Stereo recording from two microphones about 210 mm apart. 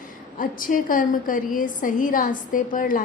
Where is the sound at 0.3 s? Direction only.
40° left (ahead or behind).